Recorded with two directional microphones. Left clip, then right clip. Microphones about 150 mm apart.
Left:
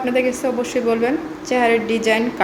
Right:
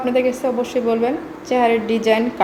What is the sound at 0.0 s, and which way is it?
A woman's voice, 10° right (ahead or behind).